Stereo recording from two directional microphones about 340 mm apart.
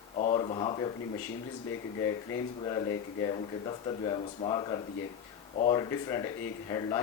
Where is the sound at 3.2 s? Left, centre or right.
Centre.